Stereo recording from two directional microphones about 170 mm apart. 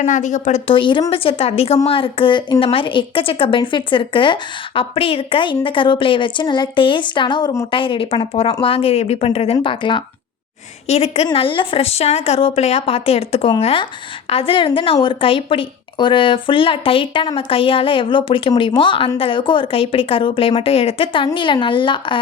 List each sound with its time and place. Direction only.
0.0 s a woman's voice: 45° left (ahead or behind); by 22.2 s 30° left (ahead or behind)